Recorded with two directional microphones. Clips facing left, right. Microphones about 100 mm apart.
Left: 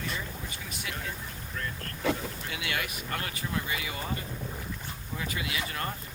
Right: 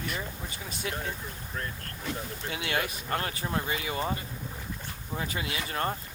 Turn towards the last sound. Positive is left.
turn(degrees=-35)  # may be behind; listen again after turning